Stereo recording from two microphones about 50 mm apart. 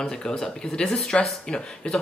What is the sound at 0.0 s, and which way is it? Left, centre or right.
Speech, centre.